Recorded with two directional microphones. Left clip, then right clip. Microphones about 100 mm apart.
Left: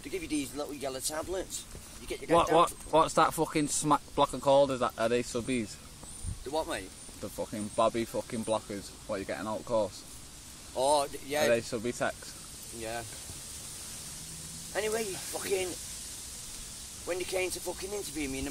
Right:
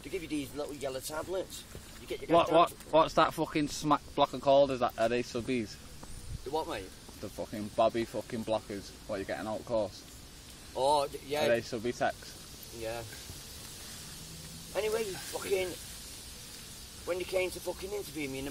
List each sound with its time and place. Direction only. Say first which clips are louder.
0.0 s speech: left 2 dB; 15° left (ahead or behind)
2.3 s speech: even; 55° left (ahead or behind)
6.5 s speech: left 2 dB; 25° left (ahead or behind)
7.3 s speech: even; 60° left (ahead or behind)
10.8 s speech: left 1 dB; 25° left (ahead or behind)
11.5 s speech: left 1 dB; 60° left (ahead or behind)
14.7 s speech: even; 20° left (ahead or behind)
17.1 s speech: even; 20° left (ahead or behind)